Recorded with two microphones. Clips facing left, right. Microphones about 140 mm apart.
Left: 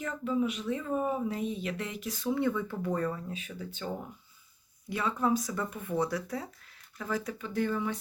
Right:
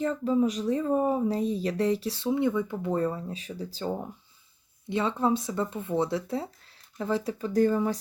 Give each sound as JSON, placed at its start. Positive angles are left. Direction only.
{"t": 0.0, "sound": "a woman's voice", "side_deg": -35}